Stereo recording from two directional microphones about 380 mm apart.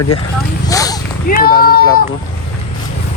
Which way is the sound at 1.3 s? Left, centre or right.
Left.